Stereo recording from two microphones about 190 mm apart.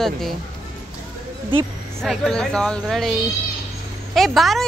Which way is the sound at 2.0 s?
Centre (ahead or behind).